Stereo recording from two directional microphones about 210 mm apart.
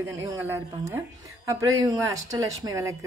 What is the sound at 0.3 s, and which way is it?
Speech, 10° right (ahead or behind).